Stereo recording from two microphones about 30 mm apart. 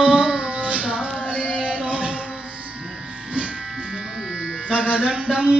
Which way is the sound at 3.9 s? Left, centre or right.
Centre.